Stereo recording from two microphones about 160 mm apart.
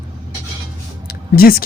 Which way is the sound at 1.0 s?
75° left (ahead or behind).